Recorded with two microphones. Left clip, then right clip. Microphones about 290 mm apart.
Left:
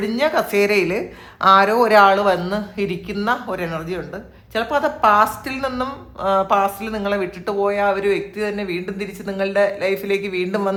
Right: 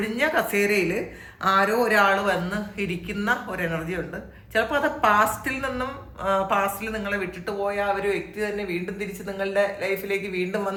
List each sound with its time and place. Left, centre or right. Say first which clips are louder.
0.0 s a woman's voice: left 4 dB; centre